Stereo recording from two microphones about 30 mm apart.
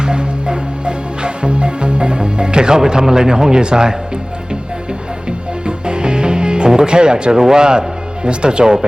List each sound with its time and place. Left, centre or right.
0.0 s music: right
5.6 s music: right
7.5 s speech: right